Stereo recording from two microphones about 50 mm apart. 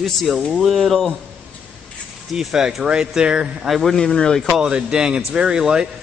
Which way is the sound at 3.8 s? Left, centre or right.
Centre.